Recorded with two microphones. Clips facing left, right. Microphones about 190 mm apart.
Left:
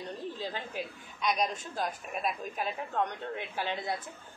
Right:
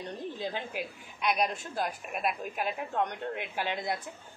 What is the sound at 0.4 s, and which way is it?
A woman's voice, 10° right (ahead or behind).